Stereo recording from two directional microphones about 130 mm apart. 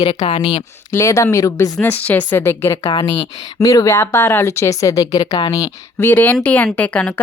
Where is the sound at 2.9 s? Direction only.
40° left (ahead or behind).